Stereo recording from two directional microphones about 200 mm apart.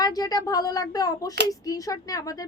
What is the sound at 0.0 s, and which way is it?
A woman's voice, 20° left (ahead or behind).